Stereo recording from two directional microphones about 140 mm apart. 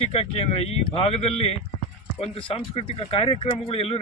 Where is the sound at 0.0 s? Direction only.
45° left (ahead or behind).